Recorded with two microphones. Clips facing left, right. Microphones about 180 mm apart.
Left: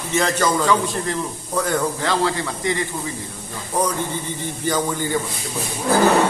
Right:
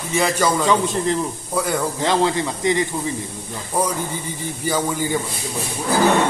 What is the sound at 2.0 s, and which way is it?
Speech, 20° right (ahead or behind).